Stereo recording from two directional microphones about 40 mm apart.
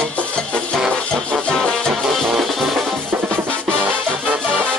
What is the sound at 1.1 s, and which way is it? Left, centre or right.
Music, centre.